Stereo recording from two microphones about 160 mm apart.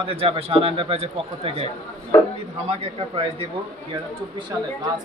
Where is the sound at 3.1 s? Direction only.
35° right (ahead or behind).